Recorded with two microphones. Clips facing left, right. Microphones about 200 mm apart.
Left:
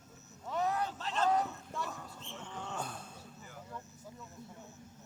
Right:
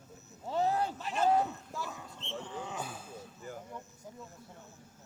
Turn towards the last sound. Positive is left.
turn(degrees=-5)  # may be behind; listen again after turning